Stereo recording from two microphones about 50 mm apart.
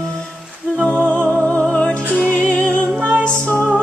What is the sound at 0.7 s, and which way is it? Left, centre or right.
Music, left.